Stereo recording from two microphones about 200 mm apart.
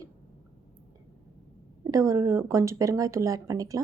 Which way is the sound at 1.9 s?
15° right (ahead or behind).